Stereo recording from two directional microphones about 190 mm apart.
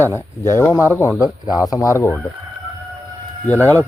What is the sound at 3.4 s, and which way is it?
Speech, 10° left (ahead or behind).